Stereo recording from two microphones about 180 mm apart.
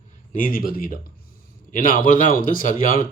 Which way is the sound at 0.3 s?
50° left (ahead or behind).